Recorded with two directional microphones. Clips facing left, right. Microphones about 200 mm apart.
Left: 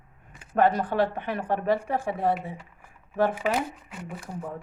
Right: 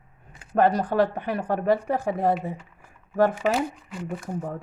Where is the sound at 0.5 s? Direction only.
40° right (ahead or behind).